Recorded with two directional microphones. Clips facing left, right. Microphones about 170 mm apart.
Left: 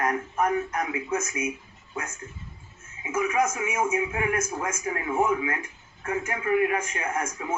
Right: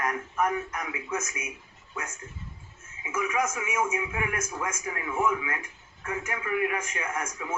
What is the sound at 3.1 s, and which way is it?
A man's voice, 30° left (ahead or behind).